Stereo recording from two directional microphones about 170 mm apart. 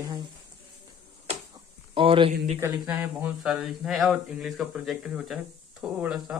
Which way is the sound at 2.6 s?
10° right (ahead or behind).